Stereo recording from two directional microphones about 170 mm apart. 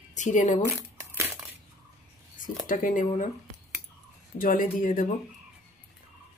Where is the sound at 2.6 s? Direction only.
50° left (ahead or behind).